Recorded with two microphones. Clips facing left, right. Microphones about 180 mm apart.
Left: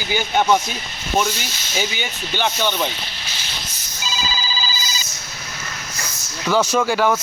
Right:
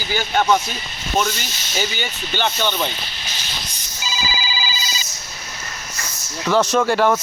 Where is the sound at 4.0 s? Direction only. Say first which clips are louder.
Even; 5° right (ahead or behind).